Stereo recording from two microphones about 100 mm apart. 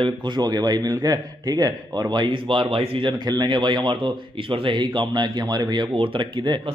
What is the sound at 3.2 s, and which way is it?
Speech, 45° right (ahead or behind).